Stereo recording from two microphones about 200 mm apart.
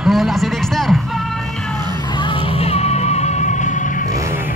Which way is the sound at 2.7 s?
30° left (ahead or behind).